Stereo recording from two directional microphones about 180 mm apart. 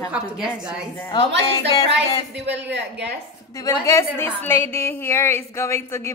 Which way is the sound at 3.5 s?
20° left (ahead or behind).